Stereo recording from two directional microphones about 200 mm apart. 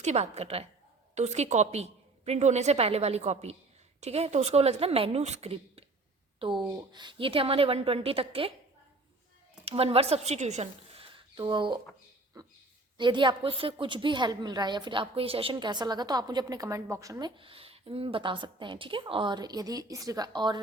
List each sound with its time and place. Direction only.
0.0 s a woman's voice: 35° right (ahead or behind)
9.6 s a woman's voice: 30° right (ahead or behind)
13.0 s a woman's voice: 25° right (ahead or behind)